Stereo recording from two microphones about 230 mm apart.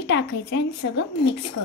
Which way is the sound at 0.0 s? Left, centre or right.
Left.